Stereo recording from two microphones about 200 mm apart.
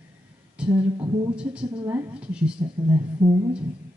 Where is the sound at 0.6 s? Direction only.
25° right (ahead or behind).